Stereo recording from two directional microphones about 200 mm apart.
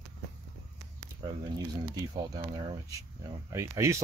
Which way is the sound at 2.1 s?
20° right (ahead or behind).